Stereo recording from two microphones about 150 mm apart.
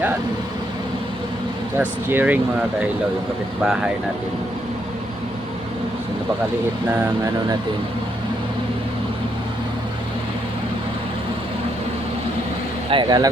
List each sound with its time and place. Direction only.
1.8 s speech: 10° right (ahead or behind)
12.9 s speech: 30° right (ahead or behind)